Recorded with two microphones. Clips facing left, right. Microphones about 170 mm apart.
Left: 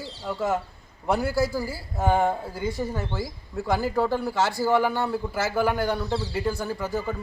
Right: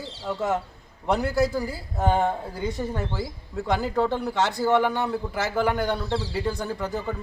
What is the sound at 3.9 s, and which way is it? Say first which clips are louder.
Speech: even; 5° left (ahead or behind).